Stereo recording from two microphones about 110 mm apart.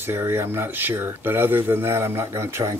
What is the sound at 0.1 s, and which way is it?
Speech, 25° right (ahead or behind).